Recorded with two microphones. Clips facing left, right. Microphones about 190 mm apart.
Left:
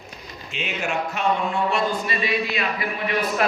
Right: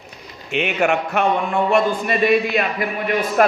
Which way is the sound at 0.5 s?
65° right (ahead or behind).